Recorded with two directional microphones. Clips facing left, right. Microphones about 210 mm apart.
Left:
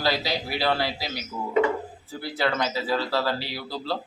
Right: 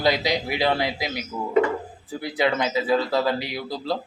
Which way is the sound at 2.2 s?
15° right (ahead or behind).